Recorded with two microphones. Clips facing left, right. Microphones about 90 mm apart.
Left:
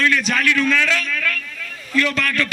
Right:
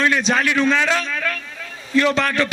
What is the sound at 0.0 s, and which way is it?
A man's voice, 25° right (ahead or behind).